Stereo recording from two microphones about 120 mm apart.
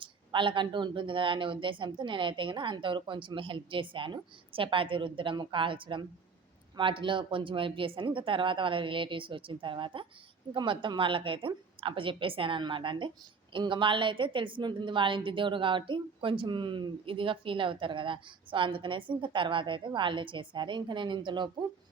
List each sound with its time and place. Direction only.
0.0 s a woman's voice: 45° right (ahead or behind)